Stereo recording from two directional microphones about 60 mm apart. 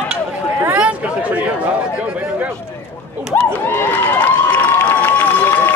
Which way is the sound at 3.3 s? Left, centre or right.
Left.